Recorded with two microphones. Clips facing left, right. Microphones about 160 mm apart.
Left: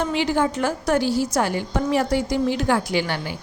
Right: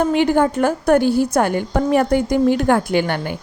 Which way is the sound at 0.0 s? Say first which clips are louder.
Right 6 dB; 50° right (ahead or behind).